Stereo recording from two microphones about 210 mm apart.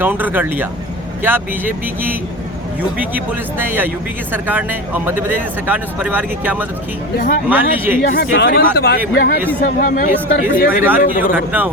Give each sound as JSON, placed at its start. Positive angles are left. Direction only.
{"t": 0.0, "sound": "speech", "side_deg": -10}
{"t": 3.2, "sound": "speech", "side_deg": -10}
{"t": 8.0, "sound": "speech", "side_deg": 45}
{"t": 11.3, "sound": "speech", "side_deg": -10}